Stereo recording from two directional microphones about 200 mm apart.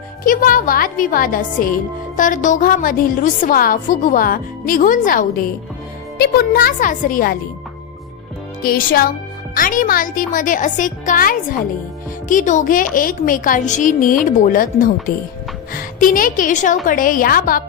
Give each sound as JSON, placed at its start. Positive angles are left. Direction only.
{"t": 0.3, "sound": "a woman's voice", "side_deg": 45}
{"t": 8.6, "sound": "a woman's voice", "side_deg": 45}